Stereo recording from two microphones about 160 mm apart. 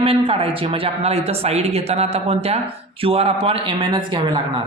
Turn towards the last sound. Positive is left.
turn(degrees=-30)  # may be behind; listen again after turning